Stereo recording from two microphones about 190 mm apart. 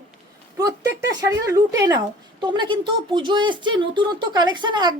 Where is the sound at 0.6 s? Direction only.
15° right (ahead or behind).